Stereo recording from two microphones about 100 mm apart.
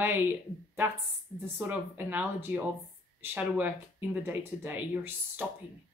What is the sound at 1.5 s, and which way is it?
Speech, 20° right (ahead or behind).